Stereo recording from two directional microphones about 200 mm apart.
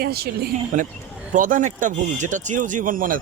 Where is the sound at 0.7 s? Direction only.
40° right (ahead or behind).